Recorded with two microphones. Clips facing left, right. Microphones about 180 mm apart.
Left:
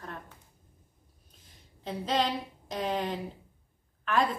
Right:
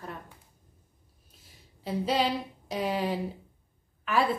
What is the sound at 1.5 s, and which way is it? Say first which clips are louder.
Speech: right 3 dB; 10° right (ahead or behind).